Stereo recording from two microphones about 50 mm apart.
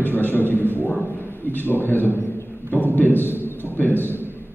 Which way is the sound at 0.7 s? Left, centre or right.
Left.